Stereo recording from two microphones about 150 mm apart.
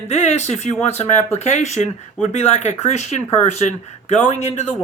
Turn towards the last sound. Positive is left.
turn(degrees=45)  # may be behind; listen again after turning